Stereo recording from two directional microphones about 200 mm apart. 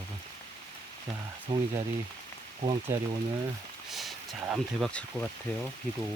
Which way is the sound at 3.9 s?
Centre (ahead or behind).